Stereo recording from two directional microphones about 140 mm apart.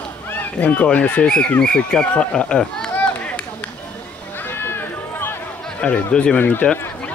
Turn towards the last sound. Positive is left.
turn(degrees=10)  # may be behind; listen again after turning